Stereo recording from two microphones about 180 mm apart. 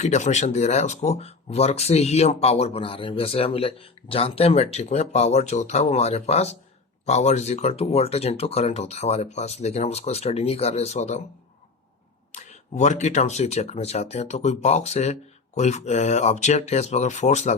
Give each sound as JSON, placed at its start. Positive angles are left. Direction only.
{"t": 0.0, "sound": "speech", "side_deg": 40}
{"t": 12.3, "sound": "speech", "side_deg": 40}